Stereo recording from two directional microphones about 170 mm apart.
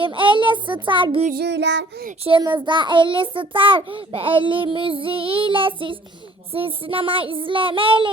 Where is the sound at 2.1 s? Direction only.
35° right (ahead or behind).